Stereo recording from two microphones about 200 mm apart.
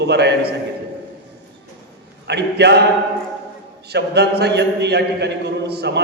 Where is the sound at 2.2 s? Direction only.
55° right (ahead or behind).